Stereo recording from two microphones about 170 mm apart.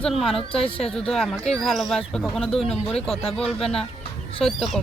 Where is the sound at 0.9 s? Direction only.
5° left (ahead or behind).